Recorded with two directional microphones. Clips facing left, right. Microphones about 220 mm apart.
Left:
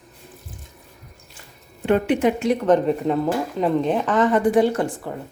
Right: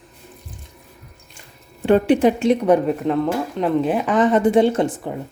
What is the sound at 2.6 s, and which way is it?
Speech, 10° right (ahead or behind).